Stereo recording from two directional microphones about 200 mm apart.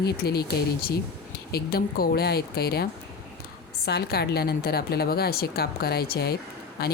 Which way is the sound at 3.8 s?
55° left (ahead or behind).